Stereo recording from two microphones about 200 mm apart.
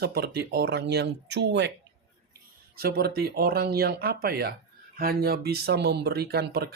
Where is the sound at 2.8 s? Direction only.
50° right (ahead or behind).